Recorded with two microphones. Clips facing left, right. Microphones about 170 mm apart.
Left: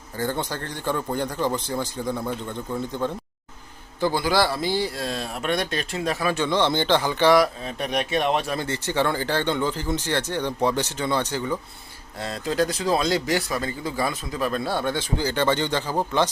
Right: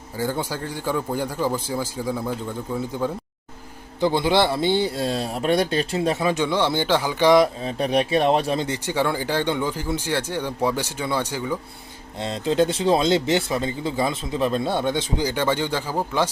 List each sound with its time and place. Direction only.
0.2 s speech: 10° right (ahead or behind)
4.0 s speech: 20° right (ahead or behind)
8.5 s speech: 15° right (ahead or behind)
12.2 s speech: 25° right (ahead or behind)